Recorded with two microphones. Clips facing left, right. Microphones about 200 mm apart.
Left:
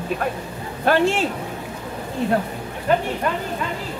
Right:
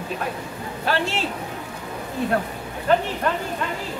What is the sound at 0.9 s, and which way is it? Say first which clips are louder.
Speech: left 6 dB; 55° left (ahead or behind).